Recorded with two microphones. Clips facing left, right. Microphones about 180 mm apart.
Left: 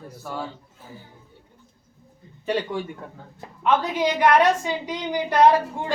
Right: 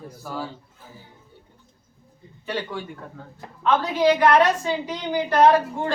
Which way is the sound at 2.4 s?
35° left (ahead or behind).